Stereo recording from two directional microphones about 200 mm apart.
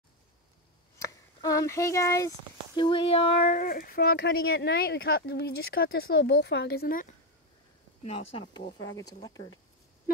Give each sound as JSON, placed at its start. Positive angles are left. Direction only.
{"t": 0.9, "sound": "speech", "side_deg": 15}
{"t": 3.6, "sound": "speech", "side_deg": 45}
{"t": 8.0, "sound": "speech", "side_deg": 30}
{"t": 10.1, "sound": "a sound", "side_deg": 50}